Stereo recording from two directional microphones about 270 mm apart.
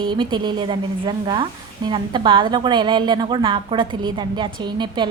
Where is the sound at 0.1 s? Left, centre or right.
Centre.